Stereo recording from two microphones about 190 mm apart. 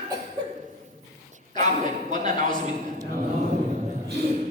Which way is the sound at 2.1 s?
40° right (ahead or behind).